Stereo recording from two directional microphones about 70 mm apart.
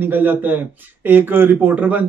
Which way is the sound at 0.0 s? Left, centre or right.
Right.